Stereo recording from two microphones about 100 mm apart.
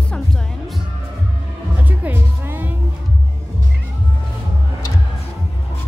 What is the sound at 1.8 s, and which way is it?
Music, 20° right (ahead or behind).